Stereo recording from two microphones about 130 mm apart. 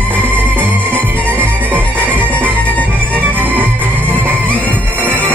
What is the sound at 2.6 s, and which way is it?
Music, 10° left (ahead or behind).